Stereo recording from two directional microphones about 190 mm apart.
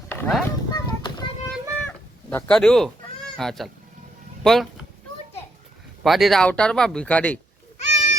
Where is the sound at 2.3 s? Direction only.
5° left (ahead or behind).